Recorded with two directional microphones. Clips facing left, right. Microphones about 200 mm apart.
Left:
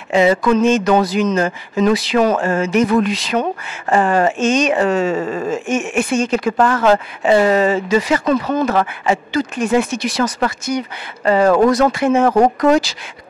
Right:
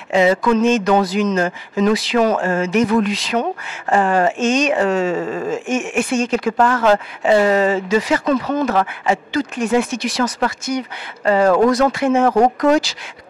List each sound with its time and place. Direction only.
0.1 s speech: 10° left (ahead or behind)
11.2 s speech: 20° left (ahead or behind)
11.8 s speech: 10° left (ahead or behind)